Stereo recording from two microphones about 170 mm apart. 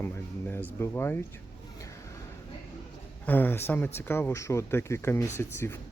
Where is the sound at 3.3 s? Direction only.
10° left (ahead or behind).